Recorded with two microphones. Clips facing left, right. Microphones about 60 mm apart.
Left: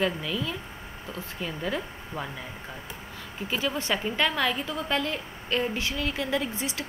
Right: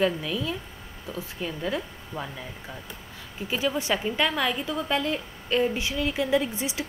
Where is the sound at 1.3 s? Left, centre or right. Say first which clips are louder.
Right 1 dB; centre.